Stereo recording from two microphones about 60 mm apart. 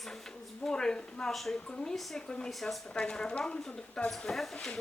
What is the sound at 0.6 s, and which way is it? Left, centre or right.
Speech, centre.